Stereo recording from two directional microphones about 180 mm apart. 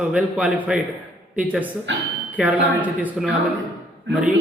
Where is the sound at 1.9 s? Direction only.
90° right.